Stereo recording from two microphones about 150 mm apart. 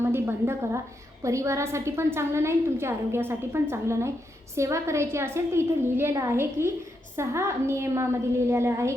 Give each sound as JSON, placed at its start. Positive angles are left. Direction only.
{"t": 0.0, "sound": "a woman's voice", "side_deg": -15}